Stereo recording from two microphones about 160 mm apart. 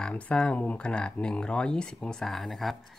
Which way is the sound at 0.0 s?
5° left (ahead or behind).